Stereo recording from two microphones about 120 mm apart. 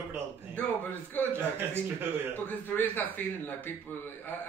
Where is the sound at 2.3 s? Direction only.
15° left (ahead or behind).